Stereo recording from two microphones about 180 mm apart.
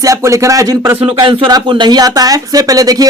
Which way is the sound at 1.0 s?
30° right (ahead or behind).